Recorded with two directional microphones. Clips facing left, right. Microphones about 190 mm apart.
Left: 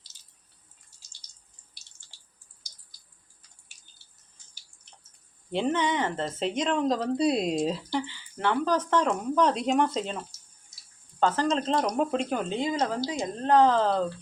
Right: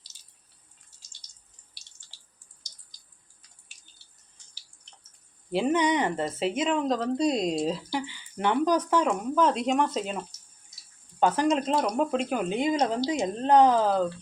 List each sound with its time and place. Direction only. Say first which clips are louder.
5.5 s speech: right 3 dB; 10° right (ahead or behind)
11.2 s speech: right 2 dB; 15° right (ahead or behind)